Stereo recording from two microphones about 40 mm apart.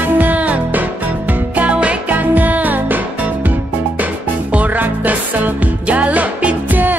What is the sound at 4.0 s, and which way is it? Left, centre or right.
Music, right.